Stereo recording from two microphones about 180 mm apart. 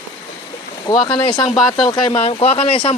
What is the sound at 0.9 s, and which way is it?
Speech, 25° left (ahead or behind).